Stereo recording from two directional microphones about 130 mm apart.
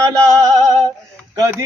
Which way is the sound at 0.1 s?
25° right (ahead or behind).